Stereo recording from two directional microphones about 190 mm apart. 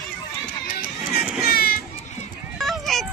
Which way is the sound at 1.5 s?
50° left (ahead or behind).